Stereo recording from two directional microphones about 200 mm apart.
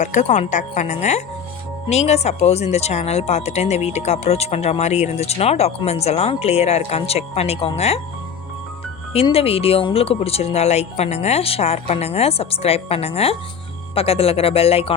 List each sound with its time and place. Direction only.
0.0 s speech: 35° left (ahead or behind)
9.1 s speech: 30° left (ahead or behind)